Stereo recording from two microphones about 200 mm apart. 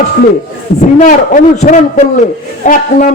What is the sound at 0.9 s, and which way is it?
A man's voice, 40° left (ahead or behind).